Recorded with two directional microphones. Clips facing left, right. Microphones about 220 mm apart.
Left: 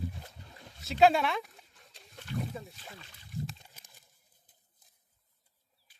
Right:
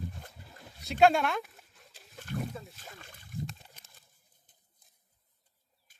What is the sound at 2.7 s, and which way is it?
Speech, 45° right (ahead or behind).